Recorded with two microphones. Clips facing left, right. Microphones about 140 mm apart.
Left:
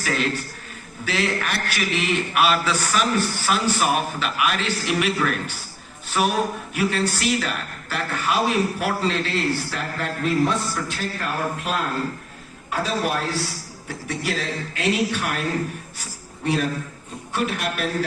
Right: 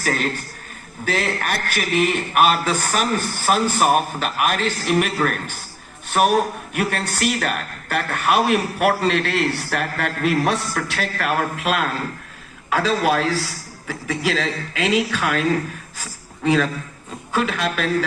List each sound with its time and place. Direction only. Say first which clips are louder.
0.0 s a man's voice: right 1 dB; 45° right (ahead or behind); by 15.4 s 90° right
17.4 s a man's voice: even; 90° right